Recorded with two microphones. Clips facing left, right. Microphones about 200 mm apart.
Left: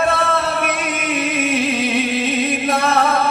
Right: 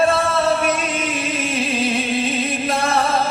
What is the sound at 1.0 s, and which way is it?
Music, 60° left (ahead or behind).